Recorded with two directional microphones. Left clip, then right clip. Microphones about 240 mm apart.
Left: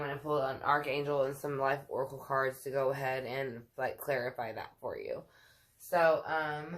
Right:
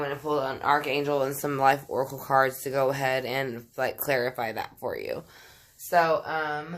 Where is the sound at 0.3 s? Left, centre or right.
Right.